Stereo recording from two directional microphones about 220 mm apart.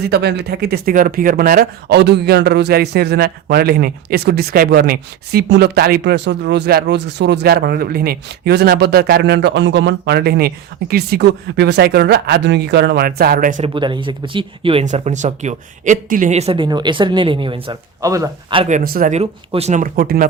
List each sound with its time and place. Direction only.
0.0 s speech: 50° right (ahead or behind)
13.7 s speech: 20° right (ahead or behind)
18.6 s speech: 40° right (ahead or behind)